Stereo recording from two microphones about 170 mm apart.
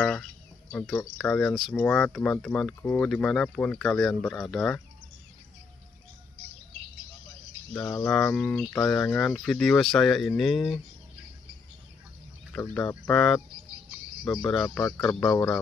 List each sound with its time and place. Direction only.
0.0 s speech: 5° left (ahead or behind)
7.7 s speech: 5° left (ahead or behind)
13.1 s speech: 5° left (ahead or behind)
14.4 s speech: centre (ahead or behind)
15.2 s speech: 20° left (ahead or behind)